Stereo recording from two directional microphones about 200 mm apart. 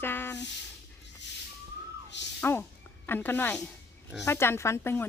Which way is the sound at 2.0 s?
60° left (ahead or behind).